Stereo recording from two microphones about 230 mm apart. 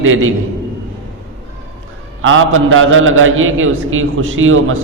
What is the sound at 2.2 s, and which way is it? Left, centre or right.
A man's voice, right.